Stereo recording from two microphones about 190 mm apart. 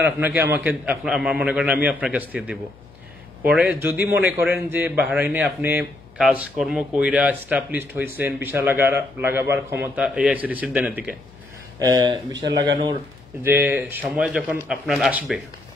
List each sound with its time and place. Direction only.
0.2 s a man's voice: 10° right (ahead or behind)
11.8 s speech: 25° right (ahead or behind)
13.4 s a man's voice: 10° right (ahead or behind)